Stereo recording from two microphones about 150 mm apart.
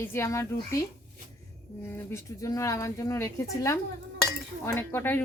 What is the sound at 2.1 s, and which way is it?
Speech, 20° left (ahead or behind).